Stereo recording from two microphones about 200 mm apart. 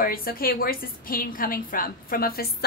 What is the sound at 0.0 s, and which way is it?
A woman's voice, 45° left (ahead or behind).